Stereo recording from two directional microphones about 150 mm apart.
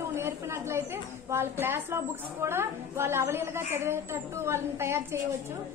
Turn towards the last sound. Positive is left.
turn(degrees=-15)  # may be behind; listen again after turning